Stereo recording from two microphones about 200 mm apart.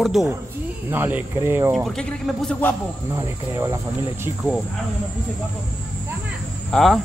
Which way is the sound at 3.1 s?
15° right (ahead or behind).